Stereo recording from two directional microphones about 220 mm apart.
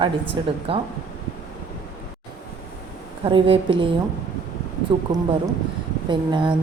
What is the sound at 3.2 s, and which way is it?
A woman's voice, 25° right (ahead or behind).